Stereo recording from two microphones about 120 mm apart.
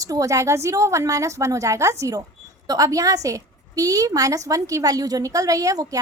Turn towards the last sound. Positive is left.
turn(degrees=-30)  # may be behind; listen again after turning